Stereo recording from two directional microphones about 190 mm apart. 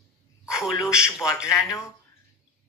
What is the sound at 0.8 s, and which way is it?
Speech, 5° right (ahead or behind).